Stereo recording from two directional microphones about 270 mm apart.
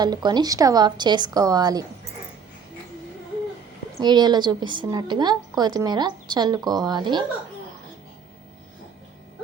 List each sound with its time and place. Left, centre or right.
0.0 s a woman's voice: centre
4.0 s a woman's voice: centre